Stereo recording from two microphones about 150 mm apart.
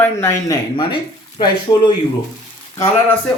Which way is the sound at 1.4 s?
30° left (ahead or behind).